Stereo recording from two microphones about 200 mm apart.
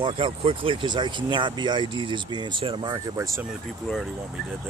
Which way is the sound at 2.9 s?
15° right (ahead or behind).